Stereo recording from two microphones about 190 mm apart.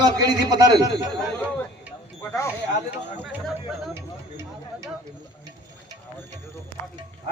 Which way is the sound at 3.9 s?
15° right (ahead or behind).